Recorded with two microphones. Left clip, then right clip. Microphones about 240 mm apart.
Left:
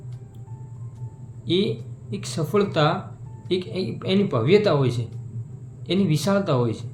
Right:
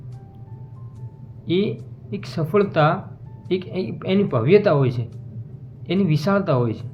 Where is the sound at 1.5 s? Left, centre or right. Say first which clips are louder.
Right 1 dB; centre.